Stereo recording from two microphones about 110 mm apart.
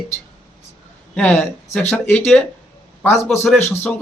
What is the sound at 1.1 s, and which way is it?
Speech, 10° left (ahead or behind).